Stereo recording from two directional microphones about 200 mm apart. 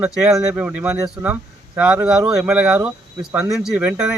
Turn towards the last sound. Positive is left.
turn(degrees=-5)  # may be behind; listen again after turning